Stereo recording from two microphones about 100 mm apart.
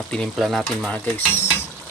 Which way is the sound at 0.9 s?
20° left (ahead or behind).